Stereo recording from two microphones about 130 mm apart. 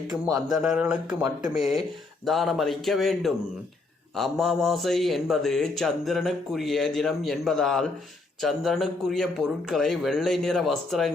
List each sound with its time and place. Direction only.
0.5 s speech: 5° right (ahead or behind)